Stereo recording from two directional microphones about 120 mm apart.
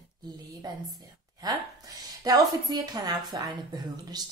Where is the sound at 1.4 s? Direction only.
35° right (ahead or behind).